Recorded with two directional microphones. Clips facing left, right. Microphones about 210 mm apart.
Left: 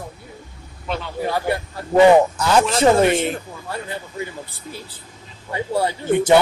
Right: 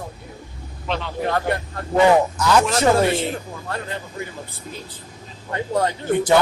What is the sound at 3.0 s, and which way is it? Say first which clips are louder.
Speech: left 3 dB; 20° left (ahead or behind).